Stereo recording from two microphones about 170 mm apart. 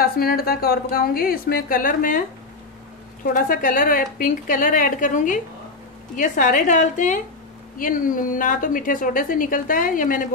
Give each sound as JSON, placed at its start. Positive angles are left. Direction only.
{"t": 0.0, "sound": "a woman's voice", "side_deg": 60}
{"t": 3.3, "sound": "a woman's voice", "side_deg": 50}